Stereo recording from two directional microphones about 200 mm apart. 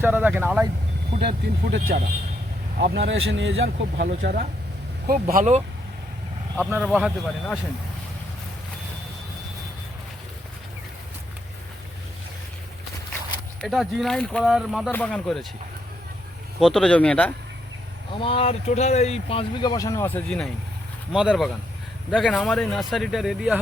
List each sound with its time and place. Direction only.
0.0 s speech: 10° right (ahead or behind)
1.2 s speech: 50° right (ahead or behind); by 4.0 s 70° right (ahead or behind)
4.0 s speech: 45° right (ahead or behind)
6.7 s speech: 5° right (ahead or behind)
13.6 s speech: centre (ahead or behind)
16.6 s speech: centre (ahead or behind)
18.2 s speech: 30° left (ahead or behind); by 23.6 s 5° right (ahead or behind)